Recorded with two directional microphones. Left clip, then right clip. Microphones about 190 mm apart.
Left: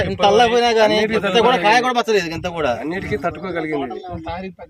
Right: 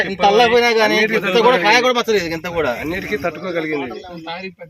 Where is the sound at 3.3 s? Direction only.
40° left (ahead or behind).